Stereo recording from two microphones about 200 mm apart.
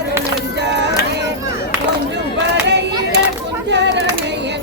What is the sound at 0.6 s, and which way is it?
Music, 60° right (ahead or behind).